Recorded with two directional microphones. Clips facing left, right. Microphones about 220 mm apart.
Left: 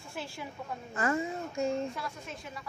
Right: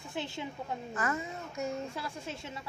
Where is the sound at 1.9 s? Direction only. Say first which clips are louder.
Right 1 dB; 30° right (ahead or behind).